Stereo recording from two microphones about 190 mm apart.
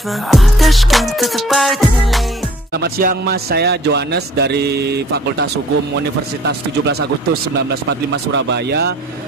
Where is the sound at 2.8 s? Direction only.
55° right (ahead or behind).